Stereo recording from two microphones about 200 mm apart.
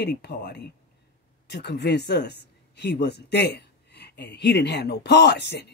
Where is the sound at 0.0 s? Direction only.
55° left (ahead or behind).